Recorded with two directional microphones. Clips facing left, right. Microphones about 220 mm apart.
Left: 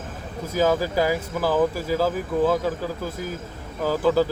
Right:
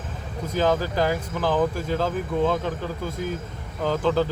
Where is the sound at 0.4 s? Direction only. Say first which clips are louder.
Left 1 dB; 10° left (ahead or behind).